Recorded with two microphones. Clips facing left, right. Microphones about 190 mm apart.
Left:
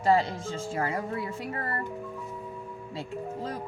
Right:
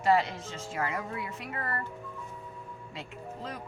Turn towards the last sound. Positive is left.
turn(degrees=30)  # may be behind; listen again after turning